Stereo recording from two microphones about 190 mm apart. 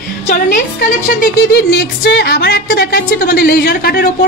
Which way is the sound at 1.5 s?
60° left (ahead or behind).